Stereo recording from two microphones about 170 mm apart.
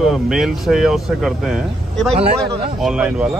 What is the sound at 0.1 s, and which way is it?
Speech, centre (ahead or behind).